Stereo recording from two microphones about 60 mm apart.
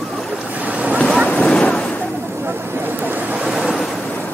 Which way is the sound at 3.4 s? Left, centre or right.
Centre.